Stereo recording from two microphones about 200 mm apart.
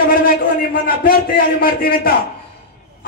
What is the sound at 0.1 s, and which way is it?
A man's voice, 45° left (ahead or behind).